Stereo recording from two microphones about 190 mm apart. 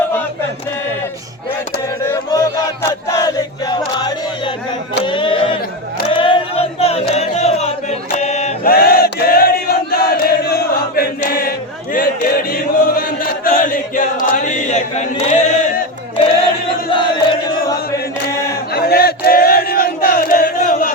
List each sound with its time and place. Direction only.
2.0 s chant: 20° left (ahead or behind)
3.2 s choir: 20° left (ahead or behind)
5.0 s music: 25° left (ahead or behind)
6.1 s a sound: 25° left (ahead or behind)
7.1 s music: 35° left (ahead or behind)
8.6 s chant: 50° left (ahead or behind)
16.9 s chant: 25° left (ahead or behind)
18.7 s battle cry: 55° left (ahead or behind)